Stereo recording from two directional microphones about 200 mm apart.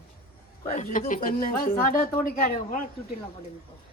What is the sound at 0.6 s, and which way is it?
Speech, 30° left (ahead or behind).